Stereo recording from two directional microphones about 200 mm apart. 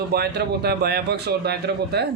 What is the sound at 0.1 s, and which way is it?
Speech, 55° right (ahead or behind).